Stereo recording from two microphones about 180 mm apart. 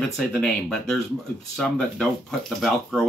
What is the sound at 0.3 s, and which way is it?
Speech, 5° left (ahead or behind).